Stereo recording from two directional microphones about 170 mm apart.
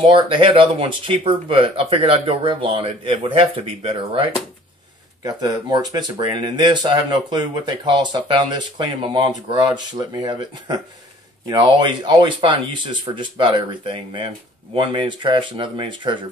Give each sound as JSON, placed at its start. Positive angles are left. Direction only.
{"t": 0.0, "sound": "speech", "side_deg": -30}